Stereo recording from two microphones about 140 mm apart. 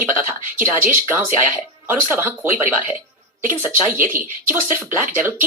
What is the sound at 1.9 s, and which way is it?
Speech, 15° right (ahead or behind).